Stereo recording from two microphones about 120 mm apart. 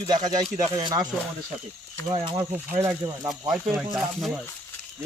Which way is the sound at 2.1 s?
45° right (ahead or behind).